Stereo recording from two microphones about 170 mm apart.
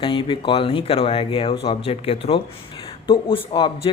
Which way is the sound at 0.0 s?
30° left (ahead or behind).